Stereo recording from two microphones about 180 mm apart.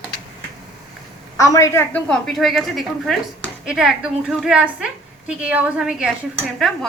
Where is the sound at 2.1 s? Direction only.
Centre (ahead or behind).